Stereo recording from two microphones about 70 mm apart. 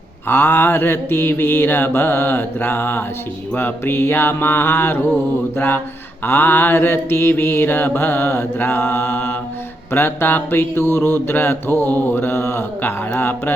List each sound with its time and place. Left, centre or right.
0.3 s mantra: left